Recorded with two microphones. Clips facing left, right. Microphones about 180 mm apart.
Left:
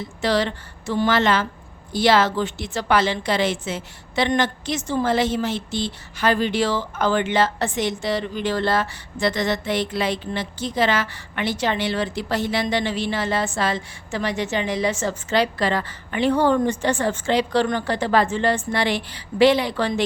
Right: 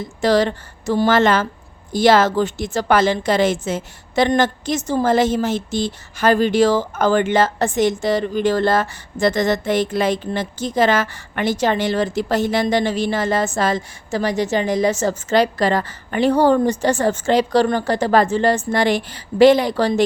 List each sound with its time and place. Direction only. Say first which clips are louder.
0.2 s a woman's voice: right 5 dB; 45° right (ahead or behind)